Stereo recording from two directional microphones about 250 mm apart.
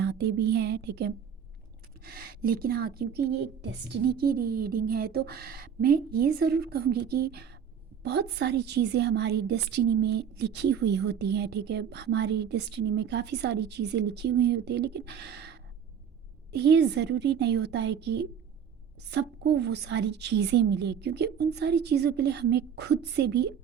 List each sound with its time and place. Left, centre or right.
0.0 s a woman's voice: right